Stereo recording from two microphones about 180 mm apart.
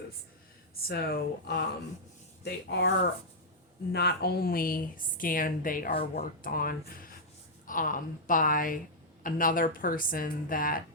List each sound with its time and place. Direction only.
0.8 s speech: 60° left (ahead or behind)
3.9 s a woman's voice: 60° left (ahead or behind)